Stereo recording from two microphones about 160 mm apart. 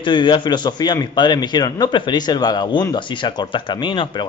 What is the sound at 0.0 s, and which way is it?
A man's voice, 30° left (ahead or behind).